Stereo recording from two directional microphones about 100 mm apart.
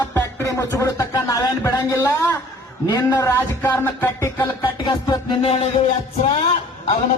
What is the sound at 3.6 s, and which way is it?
Music, 20° left (ahead or behind).